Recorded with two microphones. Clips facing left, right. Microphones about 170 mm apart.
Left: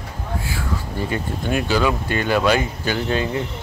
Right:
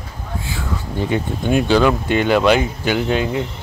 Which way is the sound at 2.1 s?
20° right (ahead or behind).